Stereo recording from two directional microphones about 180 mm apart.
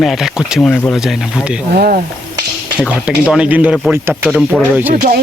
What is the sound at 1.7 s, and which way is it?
Speech, 60° right (ahead or behind).